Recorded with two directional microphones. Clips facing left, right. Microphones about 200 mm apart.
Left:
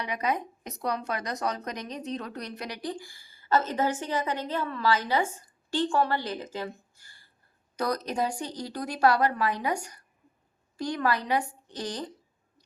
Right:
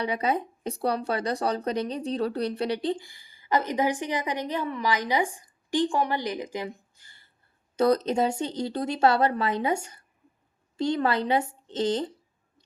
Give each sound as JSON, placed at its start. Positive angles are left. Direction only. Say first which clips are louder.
{"t": 0.0, "sound": "speech", "louder": "right 3 dB", "side_deg": -30}